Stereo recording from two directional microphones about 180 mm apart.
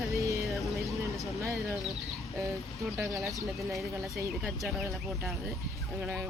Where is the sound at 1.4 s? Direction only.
15° right (ahead or behind).